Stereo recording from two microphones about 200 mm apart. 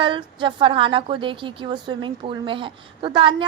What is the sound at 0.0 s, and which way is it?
A woman's voice, 25° right (ahead or behind).